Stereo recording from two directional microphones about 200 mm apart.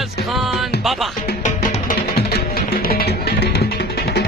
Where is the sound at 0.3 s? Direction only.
Centre (ahead or behind).